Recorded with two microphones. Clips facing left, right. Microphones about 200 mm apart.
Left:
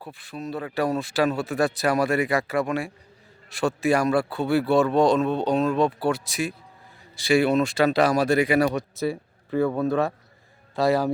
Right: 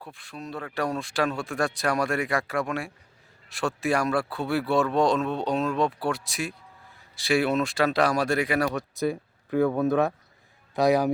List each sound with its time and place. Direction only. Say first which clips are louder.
0.0 s speech: left 5 dB; 5° left (ahead or behind)
9.8 s speech: even; 15° right (ahead or behind)